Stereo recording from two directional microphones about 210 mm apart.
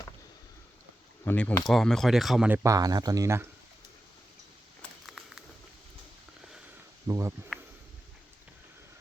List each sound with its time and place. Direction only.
1.2 s speech: 10° left (ahead or behind)
2.6 s speech: 15° right (ahead or behind)
4.8 s a sound: centre (ahead or behind)
7.1 s speech: 15° right (ahead or behind)